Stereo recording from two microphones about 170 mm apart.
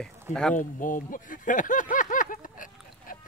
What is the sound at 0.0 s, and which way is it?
Speech, 5° left (ahead or behind).